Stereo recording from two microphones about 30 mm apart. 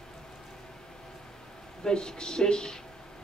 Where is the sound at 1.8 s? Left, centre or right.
Left.